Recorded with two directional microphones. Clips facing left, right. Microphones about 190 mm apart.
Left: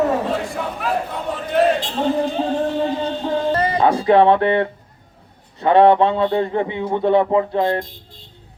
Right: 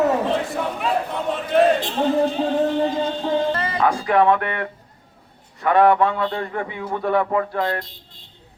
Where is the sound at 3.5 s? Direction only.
35° left (ahead or behind).